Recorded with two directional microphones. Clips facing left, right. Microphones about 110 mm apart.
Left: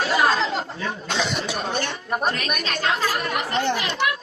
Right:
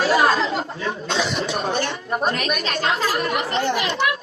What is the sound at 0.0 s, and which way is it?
Chatter, 30° right (ahead or behind).